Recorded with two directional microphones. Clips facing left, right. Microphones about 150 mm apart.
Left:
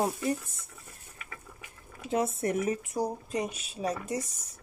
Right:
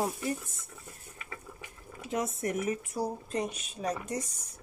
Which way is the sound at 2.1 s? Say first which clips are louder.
Left 3 dB; 30° left (ahead or behind).